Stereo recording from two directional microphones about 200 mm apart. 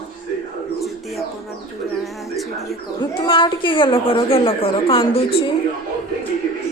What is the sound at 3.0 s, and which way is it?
A woman's voice, 25° left (ahead or behind).